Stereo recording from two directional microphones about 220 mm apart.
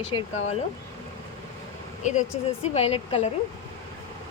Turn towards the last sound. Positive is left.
turn(degrees=25)  # may be behind; listen again after turning